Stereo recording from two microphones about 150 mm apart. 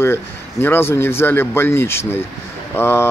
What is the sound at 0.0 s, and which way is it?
Speech, 15° left (ahead or behind).